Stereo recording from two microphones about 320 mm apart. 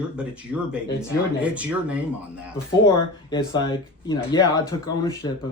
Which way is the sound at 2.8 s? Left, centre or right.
Centre.